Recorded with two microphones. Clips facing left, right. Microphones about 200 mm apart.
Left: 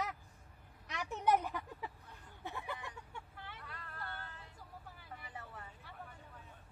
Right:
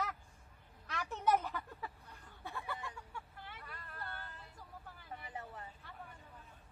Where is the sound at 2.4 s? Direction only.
20° left (ahead or behind).